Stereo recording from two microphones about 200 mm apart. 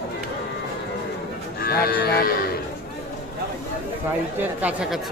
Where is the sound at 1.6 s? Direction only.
50° left (ahead or behind).